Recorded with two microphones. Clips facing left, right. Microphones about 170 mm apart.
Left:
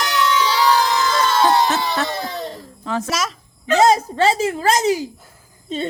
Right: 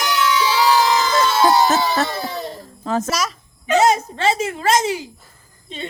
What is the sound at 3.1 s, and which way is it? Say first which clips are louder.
Speech: right 1 dB; centre (ahead or behind).